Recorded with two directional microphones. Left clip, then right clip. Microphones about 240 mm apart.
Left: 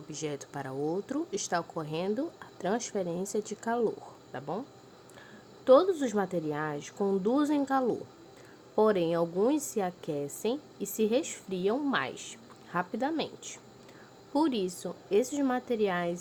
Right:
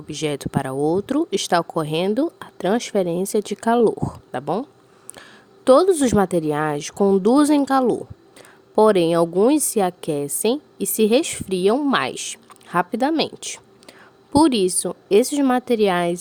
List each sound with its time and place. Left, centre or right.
0.1 s a woman's voice: right